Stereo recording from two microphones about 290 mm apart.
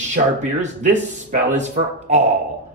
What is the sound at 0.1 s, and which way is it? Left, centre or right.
A man's voice, right.